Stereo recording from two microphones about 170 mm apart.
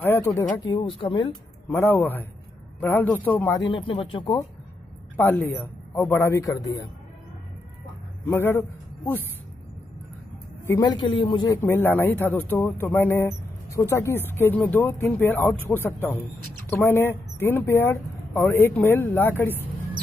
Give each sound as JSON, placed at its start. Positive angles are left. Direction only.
{"t": 0.0, "sound": "a sound", "side_deg": 15}
{"t": 0.7, "sound": "speech", "side_deg": 30}
{"t": 1.7, "sound": "speech", "side_deg": 10}
{"t": 3.6, "sound": "speech", "side_deg": 30}
{"t": 5.1, "sound": "speech", "side_deg": 10}
{"t": 8.3, "sound": "a man's voice", "side_deg": 15}
{"t": 10.7, "sound": "speech", "side_deg": 25}